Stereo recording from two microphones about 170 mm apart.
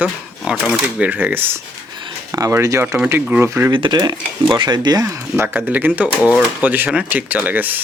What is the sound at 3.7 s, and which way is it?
Speech, 25° right (ahead or behind).